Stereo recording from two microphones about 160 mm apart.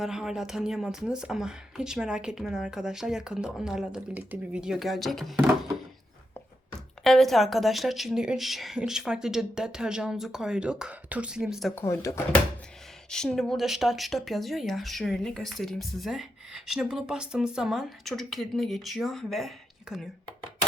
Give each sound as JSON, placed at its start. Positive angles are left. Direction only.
{"t": 0.0, "sound": "speech", "side_deg": -5}
{"t": 7.0, "sound": "speech", "side_deg": 0}
{"t": 11.7, "sound": "speech", "side_deg": 15}
{"t": 13.1, "sound": "speech", "side_deg": 5}